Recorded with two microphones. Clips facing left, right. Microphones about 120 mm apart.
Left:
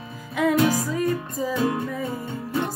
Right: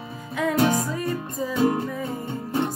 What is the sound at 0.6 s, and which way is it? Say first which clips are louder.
Music: right 3 dB; 25° right (ahead or behind).